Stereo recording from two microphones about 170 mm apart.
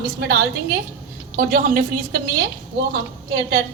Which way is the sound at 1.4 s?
50° right (ahead or behind).